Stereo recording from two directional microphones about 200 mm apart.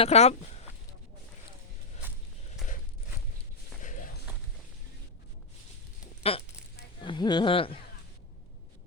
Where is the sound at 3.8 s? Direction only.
40° left (ahead or behind).